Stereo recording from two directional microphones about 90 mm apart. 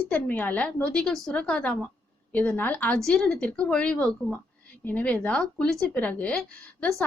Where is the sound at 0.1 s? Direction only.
20° left (ahead or behind).